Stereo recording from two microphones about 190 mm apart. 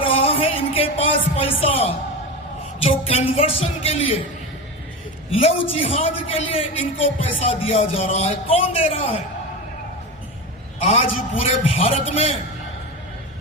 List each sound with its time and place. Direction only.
0.0 s music: 30° left (ahead or behind)
2.8 s a man's voice: 30° left (ahead or behind)
5.3 s a man's voice: 30° left (ahead or behind)
10.8 s a man's voice: 30° left (ahead or behind)